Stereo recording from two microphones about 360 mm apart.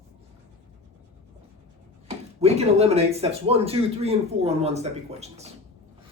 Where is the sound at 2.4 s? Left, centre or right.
Centre.